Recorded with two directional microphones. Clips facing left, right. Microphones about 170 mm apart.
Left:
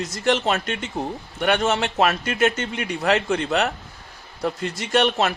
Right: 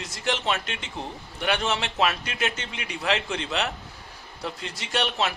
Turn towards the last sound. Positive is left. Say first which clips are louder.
# left 7 dB
turn(degrees=50)  # may be behind; listen again after turning